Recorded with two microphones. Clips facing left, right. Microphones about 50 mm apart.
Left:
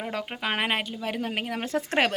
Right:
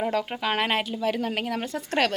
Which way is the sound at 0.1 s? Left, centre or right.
Centre.